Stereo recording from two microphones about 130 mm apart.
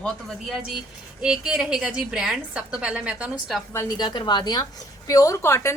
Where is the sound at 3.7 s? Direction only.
30° left (ahead or behind).